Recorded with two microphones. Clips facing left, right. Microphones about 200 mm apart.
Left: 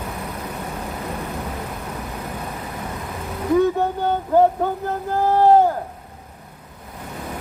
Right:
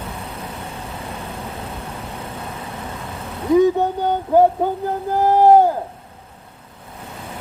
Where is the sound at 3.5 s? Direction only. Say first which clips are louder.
Right 3 dB; 15° right (ahead or behind).